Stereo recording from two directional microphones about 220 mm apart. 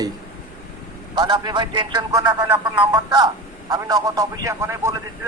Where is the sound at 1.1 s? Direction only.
20° right (ahead or behind).